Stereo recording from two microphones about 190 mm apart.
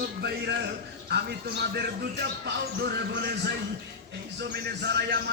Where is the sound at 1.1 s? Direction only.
60° right (ahead or behind).